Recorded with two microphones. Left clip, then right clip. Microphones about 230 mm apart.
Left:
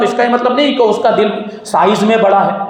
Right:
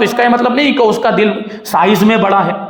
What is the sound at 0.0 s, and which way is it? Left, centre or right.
A man's voice, right.